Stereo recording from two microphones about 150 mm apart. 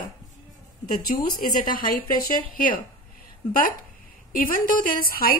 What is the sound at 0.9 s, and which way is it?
A woman's voice, 70° left (ahead or behind).